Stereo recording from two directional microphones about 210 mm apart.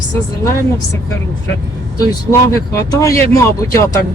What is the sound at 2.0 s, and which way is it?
Speech, 15° left (ahead or behind).